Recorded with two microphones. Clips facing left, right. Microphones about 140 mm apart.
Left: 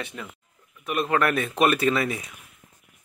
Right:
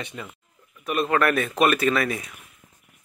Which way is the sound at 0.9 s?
15° left (ahead or behind).